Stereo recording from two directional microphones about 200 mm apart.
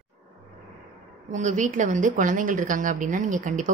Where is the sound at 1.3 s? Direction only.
35° right (ahead or behind).